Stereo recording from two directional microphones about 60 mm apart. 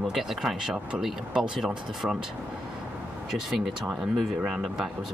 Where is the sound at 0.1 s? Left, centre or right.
Centre.